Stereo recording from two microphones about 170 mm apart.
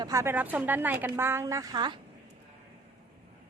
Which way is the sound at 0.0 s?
20° right (ahead or behind).